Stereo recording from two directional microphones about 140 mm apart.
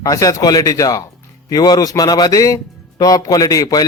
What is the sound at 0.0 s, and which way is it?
A man's voice, 25° left (ahead or behind).